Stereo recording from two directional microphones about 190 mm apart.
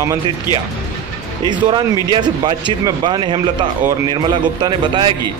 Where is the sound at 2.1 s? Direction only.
25° right (ahead or behind).